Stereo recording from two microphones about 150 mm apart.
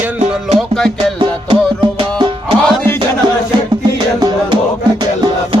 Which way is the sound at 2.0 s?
35° right (ahead or behind).